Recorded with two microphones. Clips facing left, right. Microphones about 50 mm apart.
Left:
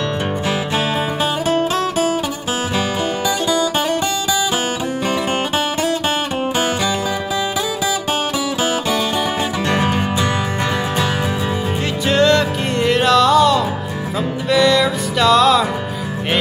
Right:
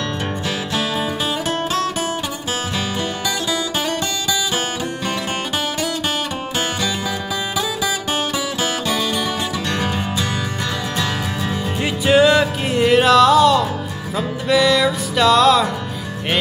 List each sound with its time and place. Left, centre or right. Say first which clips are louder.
1.5 s music: left 4 dB; centre
9.7 s music: left 6 dB; left
12.1 s music: right 1 dB; centre